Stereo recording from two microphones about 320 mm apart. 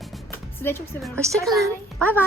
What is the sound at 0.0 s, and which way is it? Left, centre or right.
Speech, centre.